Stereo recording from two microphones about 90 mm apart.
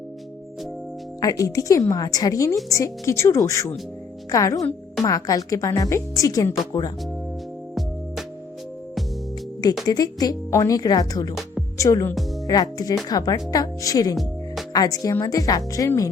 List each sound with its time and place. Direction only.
1.2 s a woman's voice: 40° left (ahead or behind)
9.8 s a woman's voice: 45° left (ahead or behind)